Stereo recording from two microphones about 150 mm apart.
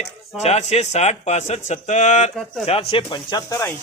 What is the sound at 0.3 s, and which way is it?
Speech, 45° left (ahead or behind).